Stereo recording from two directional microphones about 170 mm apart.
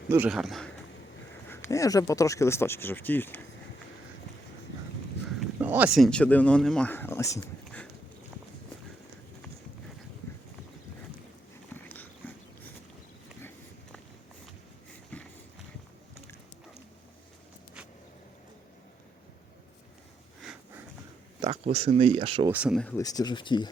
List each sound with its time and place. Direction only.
0.3 s speech: centre (ahead or behind)
1.5 s speech: 15° left (ahead or behind)
5.4 s speech: 10° right (ahead or behind); by 7.3 s 15° left (ahead or behind)
11.7 s dog: 10° left (ahead or behind)
15.1 s run: 5° left (ahead or behind)
20.4 s sniff: 5° right (ahead or behind)
21.4 s speech: 35° right (ahead or behind)
22.4 s speech: 5° right (ahead or behind)
23.0 s speech: 20° left (ahead or behind)